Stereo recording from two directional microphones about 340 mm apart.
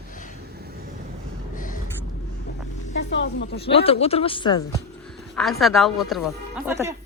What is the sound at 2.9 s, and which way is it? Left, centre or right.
Speech, left.